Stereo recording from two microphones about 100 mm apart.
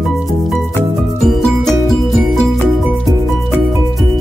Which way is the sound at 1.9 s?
Centre (ahead or behind).